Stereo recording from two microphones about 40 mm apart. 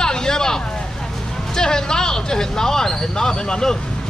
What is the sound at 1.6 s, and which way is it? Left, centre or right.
Speech, centre.